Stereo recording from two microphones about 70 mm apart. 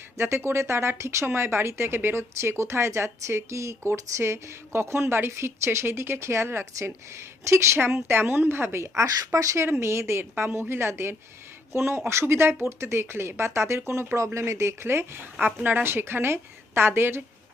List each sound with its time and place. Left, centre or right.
0.2 s speech: right
9.0 s speech: right
9.6 s speech: right